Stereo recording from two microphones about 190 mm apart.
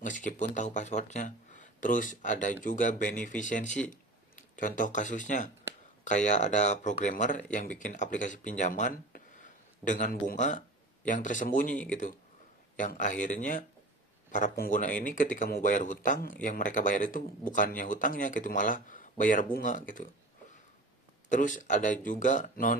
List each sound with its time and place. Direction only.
0.0 s speech: 40° left (ahead or behind)
21.2 s speech: 40° left (ahead or behind)